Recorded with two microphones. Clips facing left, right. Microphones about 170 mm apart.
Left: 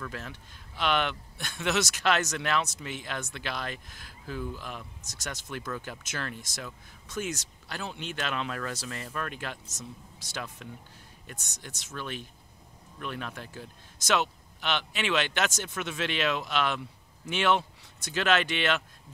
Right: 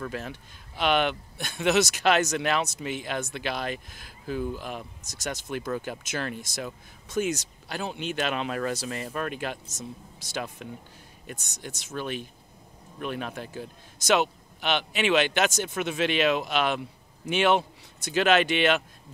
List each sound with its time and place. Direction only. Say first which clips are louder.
0.1 s a man's voice: right 5 dB; 15° right (ahead or behind)